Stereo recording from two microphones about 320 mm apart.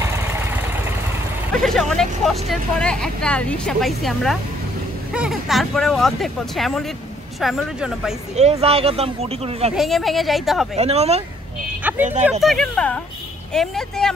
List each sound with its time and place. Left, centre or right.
0.0 s vehicle: centre
1.5 s speech: centre
8.4 s speech: centre
9.8 s speech: centre
10.8 s speech: centre
11.8 s speech: centre